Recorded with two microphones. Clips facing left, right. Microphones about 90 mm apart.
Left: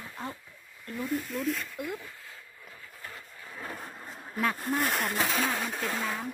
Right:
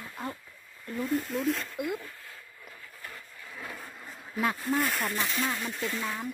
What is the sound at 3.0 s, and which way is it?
Bee, 30° left (ahead or behind).